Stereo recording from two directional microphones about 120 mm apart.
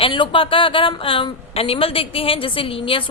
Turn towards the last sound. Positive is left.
turn(degrees=50)  # may be behind; listen again after turning